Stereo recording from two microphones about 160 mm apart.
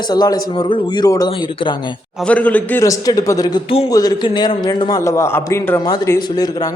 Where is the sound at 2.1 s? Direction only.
5° left (ahead or behind).